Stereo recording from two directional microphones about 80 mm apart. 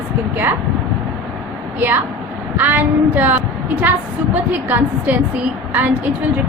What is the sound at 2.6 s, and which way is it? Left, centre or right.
Speech, right.